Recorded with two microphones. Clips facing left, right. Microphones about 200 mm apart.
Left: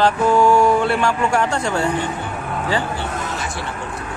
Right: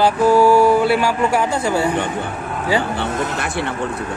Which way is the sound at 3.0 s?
60° right (ahead or behind).